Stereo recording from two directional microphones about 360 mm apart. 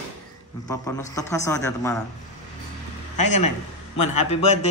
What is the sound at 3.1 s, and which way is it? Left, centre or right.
Speech, left.